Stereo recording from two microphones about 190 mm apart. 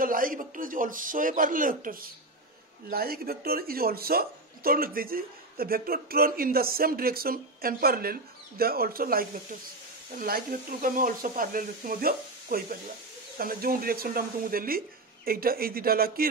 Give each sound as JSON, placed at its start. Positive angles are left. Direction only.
{"t": 0.0, "sound": "a man's voice", "side_deg": -45}